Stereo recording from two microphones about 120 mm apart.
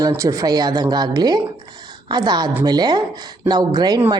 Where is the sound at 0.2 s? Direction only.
30° right (ahead or behind).